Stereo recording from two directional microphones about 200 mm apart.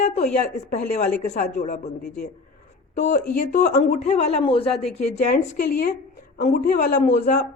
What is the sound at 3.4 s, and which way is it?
A woman's voice, 40° left (ahead or behind).